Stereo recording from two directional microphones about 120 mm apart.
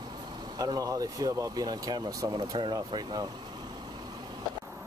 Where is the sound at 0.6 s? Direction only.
30° right (ahead or behind).